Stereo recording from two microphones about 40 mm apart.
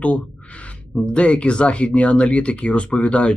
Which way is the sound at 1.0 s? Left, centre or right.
Left.